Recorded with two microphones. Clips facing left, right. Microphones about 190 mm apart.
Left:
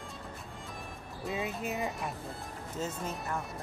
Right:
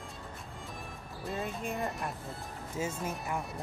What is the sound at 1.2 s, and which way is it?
Speech, centre (ahead or behind).